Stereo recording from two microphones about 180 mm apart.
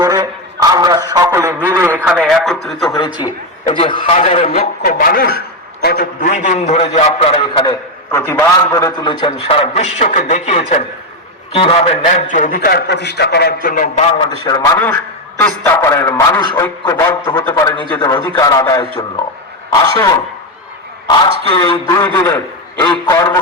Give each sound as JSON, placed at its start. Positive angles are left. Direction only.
{"t": 0.0, "sound": "a sound", "side_deg": -20}
{"t": 2.0, "sound": "radio", "side_deg": 0}
{"t": 3.2, "sound": "a man's voice", "side_deg": 25}
{"t": 4.9, "sound": "a man's voice", "side_deg": 55}
{"t": 7.7, "sound": "a man's voice", "side_deg": 15}
{"t": 14.2, "sound": "a man's voice", "side_deg": 20}
{"t": 19.9, "sound": "a man's voice", "side_deg": 20}
{"t": 21.5, "sound": "a man's voice", "side_deg": 25}